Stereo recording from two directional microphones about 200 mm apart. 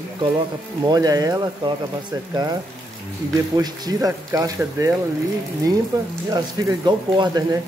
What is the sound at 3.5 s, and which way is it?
Speech, 20° right (ahead or behind).